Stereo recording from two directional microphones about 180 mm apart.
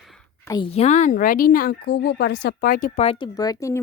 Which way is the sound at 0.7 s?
40° left (ahead or behind).